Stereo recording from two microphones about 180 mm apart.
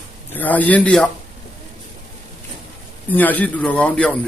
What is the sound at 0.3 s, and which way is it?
Speech, 10° left (ahead or behind).